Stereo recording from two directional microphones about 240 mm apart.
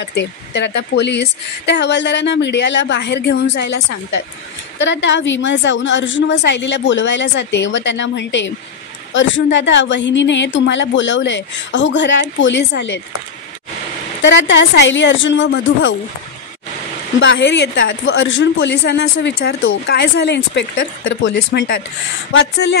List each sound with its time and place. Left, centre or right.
0.0 s a woman's voice: left
14.2 s a woman's voice: left
17.2 s a woman's voice: left